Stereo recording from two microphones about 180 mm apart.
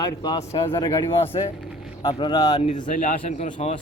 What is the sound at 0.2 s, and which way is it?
Speech, 30° left (ahead or behind).